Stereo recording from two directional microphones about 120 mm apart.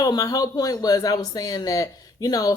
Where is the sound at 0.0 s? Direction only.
30° left (ahead or behind).